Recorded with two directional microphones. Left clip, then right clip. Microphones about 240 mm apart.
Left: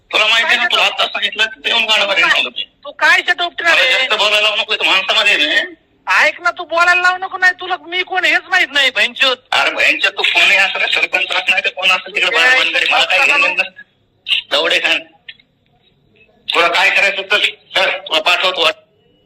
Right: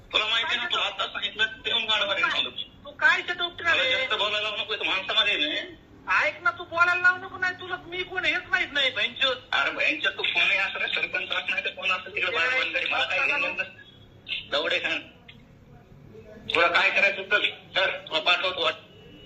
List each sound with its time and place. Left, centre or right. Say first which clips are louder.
0.1 s a man's voice: left 13 dB; left
16.5 s a man's voice: left 10 dB; left